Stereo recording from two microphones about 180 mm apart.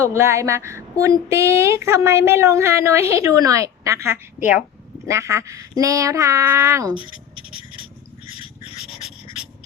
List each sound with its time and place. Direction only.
0.0 s a woman's voice: 15° right (ahead or behind)
6.9 s writing: 30° left (ahead or behind)
8.8 s a sound: 5° right (ahead or behind)